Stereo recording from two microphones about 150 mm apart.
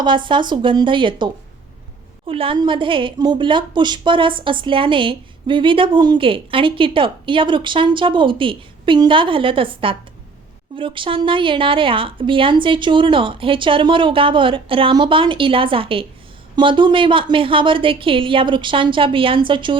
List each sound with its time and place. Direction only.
0.0 s a woman's voice: 30° right (ahead or behind)